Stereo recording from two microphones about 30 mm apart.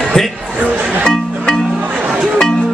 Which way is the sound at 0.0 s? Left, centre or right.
Centre.